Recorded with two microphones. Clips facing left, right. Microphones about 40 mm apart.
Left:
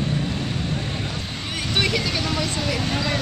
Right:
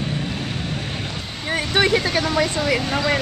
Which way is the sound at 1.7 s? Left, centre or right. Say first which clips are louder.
Right 4 dB; right.